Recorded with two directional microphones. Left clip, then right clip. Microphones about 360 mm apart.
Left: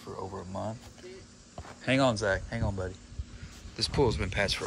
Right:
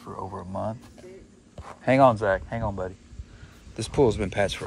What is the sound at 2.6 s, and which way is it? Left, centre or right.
Speech, centre.